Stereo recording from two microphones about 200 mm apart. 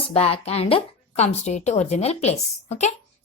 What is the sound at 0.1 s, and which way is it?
Speech, 30° left (ahead or behind).